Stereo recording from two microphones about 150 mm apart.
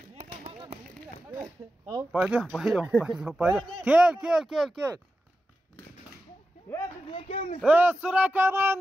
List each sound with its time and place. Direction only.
1.3 s a sound: 20° right (ahead or behind)
2.1 s speech: 10° right (ahead or behind)
7.1 s speech: 35° left (ahead or behind)
7.6 s speech: 10° right (ahead or behind)